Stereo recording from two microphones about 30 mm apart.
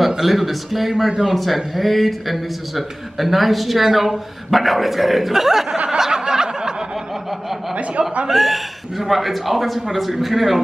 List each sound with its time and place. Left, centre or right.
0.2 s speech: centre
5.9 s a sound: centre
8.3 s speech: centre